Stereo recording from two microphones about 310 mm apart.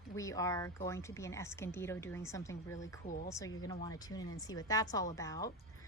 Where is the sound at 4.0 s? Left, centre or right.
Centre.